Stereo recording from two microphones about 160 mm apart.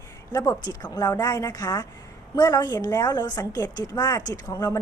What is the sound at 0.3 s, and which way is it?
A woman's voice, 20° left (ahead or behind).